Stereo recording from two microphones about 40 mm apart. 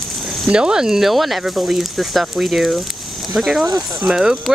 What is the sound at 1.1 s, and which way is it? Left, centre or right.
Speech, centre.